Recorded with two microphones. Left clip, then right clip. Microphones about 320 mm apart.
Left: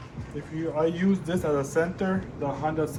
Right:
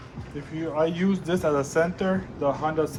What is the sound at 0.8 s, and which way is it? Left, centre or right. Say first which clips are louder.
Speech: right 1 dB; right.